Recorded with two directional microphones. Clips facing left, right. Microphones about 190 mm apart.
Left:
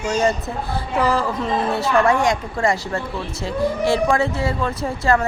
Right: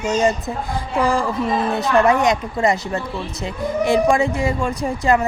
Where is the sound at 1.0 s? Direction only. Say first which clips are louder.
Right 1 dB; 10° right (ahead or behind).